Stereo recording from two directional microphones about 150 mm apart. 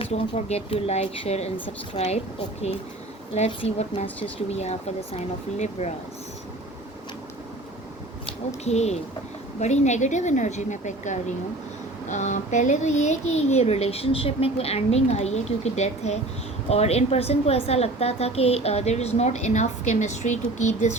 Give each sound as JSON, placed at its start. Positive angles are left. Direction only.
{"t": 0.0, "sound": "a woman's voice", "side_deg": 45}
{"t": 3.3, "sound": "a woman's voice", "side_deg": 45}
{"t": 8.3, "sound": "a woman's voice", "side_deg": 45}